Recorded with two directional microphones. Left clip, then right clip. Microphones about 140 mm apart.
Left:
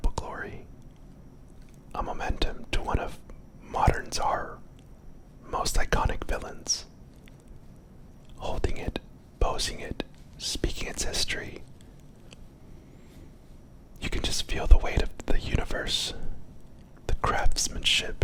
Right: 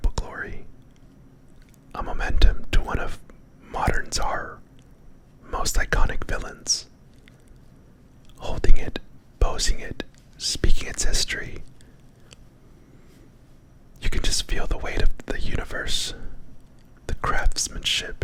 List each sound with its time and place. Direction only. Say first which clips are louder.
0.0 s whispering: right 2 dB; 5° right (ahead or behind)
1.9 s whispering: right 2 dB; 10° right (ahead or behind)
8.4 s whispering: right 2 dB; 10° right (ahead or behind)
14.0 s whispering: right 3 dB; 5° right (ahead or behind)